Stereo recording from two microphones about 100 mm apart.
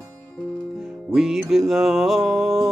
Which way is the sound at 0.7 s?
5° right (ahead or behind).